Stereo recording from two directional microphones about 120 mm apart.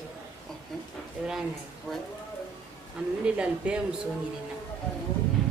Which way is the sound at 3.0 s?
10° right (ahead or behind).